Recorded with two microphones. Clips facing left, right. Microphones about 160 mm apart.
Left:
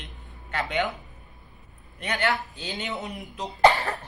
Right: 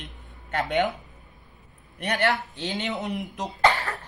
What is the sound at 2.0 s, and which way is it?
Speech, 45° right (ahead or behind).